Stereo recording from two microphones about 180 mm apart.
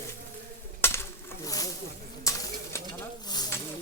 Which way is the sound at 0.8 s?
15° left (ahead or behind).